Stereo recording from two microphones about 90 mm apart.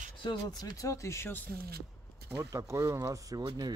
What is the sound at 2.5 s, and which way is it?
Speech, 35° right (ahead or behind).